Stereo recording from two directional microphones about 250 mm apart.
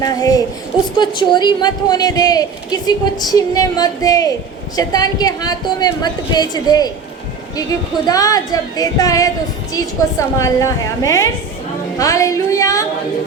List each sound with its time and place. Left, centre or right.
0.0 s a woman's voice: centre
8.0 s a woman's voice: centre